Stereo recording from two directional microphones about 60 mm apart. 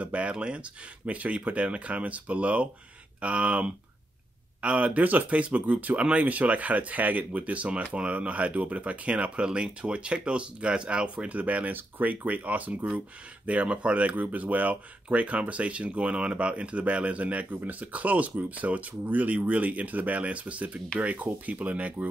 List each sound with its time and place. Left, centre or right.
0.0 s speech: right